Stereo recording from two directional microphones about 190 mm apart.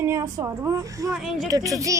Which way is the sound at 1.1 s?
Centre (ahead or behind).